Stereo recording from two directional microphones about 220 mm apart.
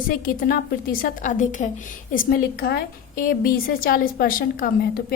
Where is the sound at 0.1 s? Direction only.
40° left (ahead or behind).